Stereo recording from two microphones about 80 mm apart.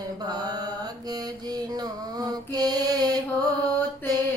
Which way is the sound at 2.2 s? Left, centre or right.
Right.